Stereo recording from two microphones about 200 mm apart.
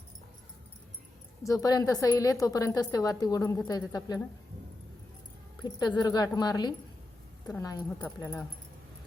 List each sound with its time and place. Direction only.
1.5 s a woman's voice: 20° left (ahead or behind)
6.0 s a woman's voice: 20° left (ahead or behind)